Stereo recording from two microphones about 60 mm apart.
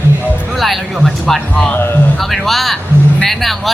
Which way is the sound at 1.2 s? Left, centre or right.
Centre.